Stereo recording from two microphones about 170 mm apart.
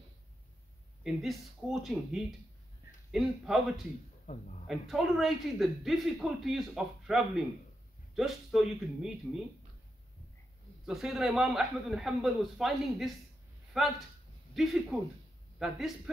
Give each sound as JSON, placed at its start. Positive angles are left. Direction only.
{"t": 1.0, "sound": "a man's voice", "side_deg": 0}
{"t": 4.3, "sound": "a man's voice", "side_deg": 50}
{"t": 4.6, "sound": "a man's voice", "side_deg": 0}
{"t": 10.9, "sound": "a man's voice", "side_deg": 0}